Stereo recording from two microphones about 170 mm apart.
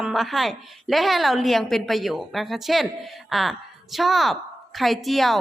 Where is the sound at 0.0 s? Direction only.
Centre (ahead or behind).